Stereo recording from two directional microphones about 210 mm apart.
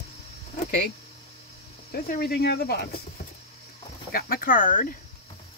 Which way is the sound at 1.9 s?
45° left (ahead or behind).